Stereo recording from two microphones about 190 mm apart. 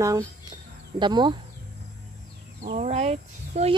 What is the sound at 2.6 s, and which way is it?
Speech, 40° right (ahead or behind).